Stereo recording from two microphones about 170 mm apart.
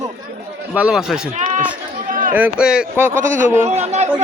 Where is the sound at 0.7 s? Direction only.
5° right (ahead or behind).